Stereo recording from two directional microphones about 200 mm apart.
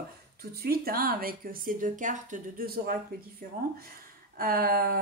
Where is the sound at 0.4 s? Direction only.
50° right (ahead or behind).